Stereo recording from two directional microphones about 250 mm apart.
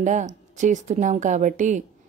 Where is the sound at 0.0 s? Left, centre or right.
Right.